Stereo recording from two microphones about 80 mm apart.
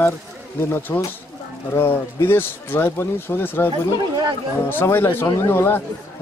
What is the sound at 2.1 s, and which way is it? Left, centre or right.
Speech, left.